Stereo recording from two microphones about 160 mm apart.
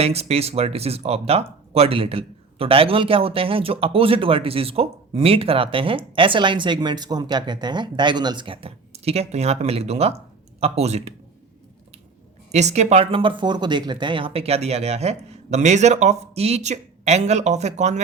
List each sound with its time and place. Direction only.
0.0 s speech: 40° right (ahead or behind)
12.5 s speech: 45° right (ahead or behind)